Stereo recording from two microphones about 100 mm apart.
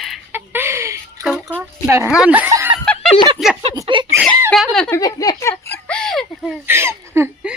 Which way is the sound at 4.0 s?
55° right (ahead or behind).